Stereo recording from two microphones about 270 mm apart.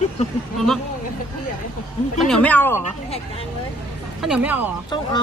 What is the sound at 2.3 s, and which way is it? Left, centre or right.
Speech, centre.